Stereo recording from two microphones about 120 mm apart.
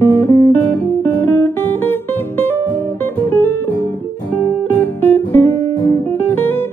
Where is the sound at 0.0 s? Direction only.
20° left (ahead or behind).